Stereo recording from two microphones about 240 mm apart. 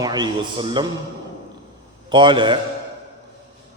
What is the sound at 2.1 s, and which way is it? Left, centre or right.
Speech, centre.